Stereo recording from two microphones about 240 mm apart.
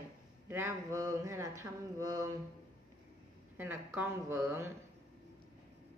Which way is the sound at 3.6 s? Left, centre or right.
Centre.